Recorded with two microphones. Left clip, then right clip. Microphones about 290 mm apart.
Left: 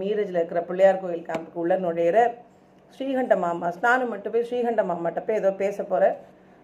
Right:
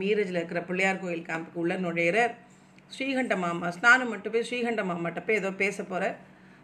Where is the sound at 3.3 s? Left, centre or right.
Right.